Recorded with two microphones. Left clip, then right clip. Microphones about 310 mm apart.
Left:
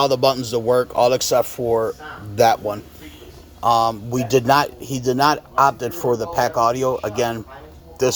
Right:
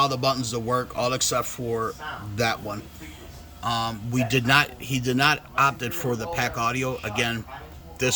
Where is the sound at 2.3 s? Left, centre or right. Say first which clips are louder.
Left 11 dB; centre.